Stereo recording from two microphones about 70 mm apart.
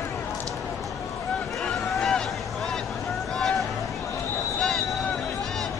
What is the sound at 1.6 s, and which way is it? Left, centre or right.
Vehicle, centre.